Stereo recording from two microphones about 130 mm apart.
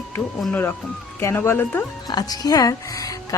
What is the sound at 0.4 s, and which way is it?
Speech, 10° left (ahead or behind).